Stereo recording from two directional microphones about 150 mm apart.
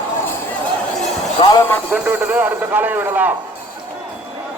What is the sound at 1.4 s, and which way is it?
Speech, 30° left (ahead or behind).